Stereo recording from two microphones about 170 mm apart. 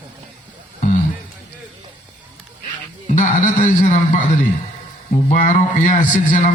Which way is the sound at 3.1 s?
50° left (ahead or behind).